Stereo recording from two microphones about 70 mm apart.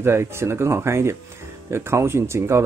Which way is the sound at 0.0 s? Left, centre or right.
Right.